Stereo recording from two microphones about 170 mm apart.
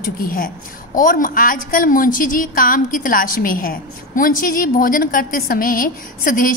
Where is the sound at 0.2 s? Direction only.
55° left (ahead or behind).